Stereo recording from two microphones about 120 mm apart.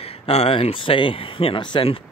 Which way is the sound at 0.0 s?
55° left (ahead or behind).